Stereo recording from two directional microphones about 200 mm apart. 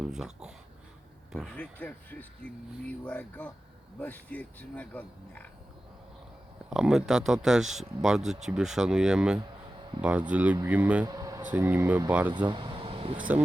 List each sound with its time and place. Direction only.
0.0 s speech: 5° right (ahead or behind)
1.8 s speech: 10° left (ahead or behind)
6.7 s speech: 5° right (ahead or behind)
11.0 s a sound: 20° right (ahead or behind)
11.5 s speech: 10° right (ahead or behind)
12.5 s a sound: 25° right (ahead or behind)